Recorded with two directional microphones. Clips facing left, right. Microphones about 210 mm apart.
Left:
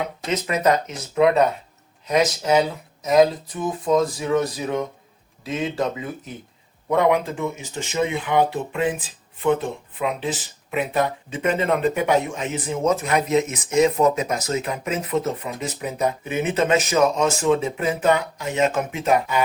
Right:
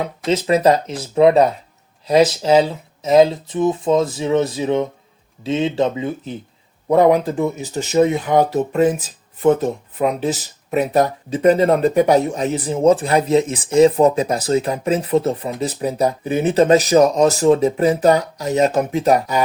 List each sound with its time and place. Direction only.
0.0 s speech: 30° right (ahead or behind)